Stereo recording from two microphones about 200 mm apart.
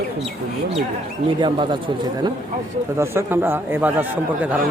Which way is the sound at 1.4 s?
25° right (ahead or behind).